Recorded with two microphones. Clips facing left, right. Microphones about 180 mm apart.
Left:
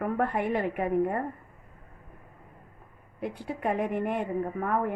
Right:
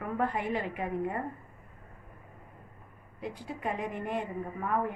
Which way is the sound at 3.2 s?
60° left (ahead or behind).